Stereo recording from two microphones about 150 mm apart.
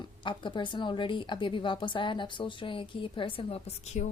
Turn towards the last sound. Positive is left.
turn(degrees=50)  # may be behind; listen again after turning